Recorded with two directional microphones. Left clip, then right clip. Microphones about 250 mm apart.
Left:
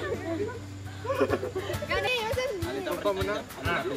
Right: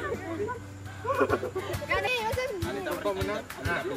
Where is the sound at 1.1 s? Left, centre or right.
Centre.